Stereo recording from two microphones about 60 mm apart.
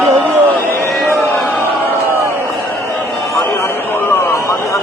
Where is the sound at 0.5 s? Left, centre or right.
Left.